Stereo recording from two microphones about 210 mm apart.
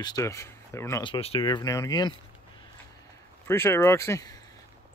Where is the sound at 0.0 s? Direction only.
15° left (ahead or behind).